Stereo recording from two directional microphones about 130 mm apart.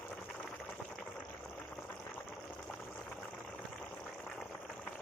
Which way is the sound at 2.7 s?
10° left (ahead or behind).